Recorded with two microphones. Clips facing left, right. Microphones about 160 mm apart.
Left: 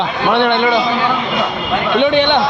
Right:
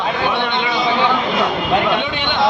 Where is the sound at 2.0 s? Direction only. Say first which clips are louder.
Left 10 dB; 65° left (ahead or behind).